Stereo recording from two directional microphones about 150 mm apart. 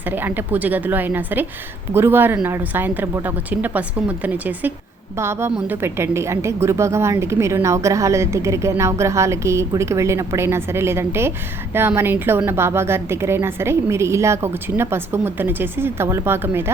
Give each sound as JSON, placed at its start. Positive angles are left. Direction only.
{"t": 0.0, "sound": "a woman's voice", "side_deg": -10}